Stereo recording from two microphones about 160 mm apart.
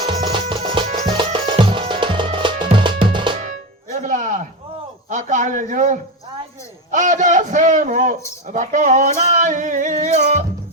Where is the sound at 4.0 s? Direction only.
55° right (ahead or behind).